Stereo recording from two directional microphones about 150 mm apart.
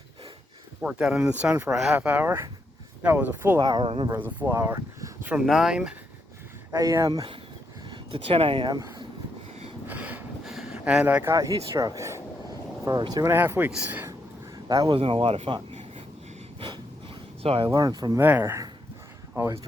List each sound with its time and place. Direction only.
0.8 s speech: 5° right (ahead or behind)
3.6 s speech: 25° right (ahead or behind)
3.8 s speech: 40° right (ahead or behind)
4.1 s speech: 10° right (ahead or behind)
5.3 s speech: 5° right (ahead or behind)
6.7 s speech: 20° right (ahead or behind)
9.8 s a sound: 10° right (ahead or behind)
10.4 s speech: centre (ahead or behind); by 13.3 s 25° right (ahead or behind)
13.3 s speech: 15° right (ahead or behind)
14.7 s speech: 30° right (ahead or behind)
16.6 s gasp: 30° right (ahead or behind)
17.4 s speech: 40° right (ahead or behind)
17.7 s speech: 25° right (ahead or behind)
18.2 s speech: 15° right (ahead or behind)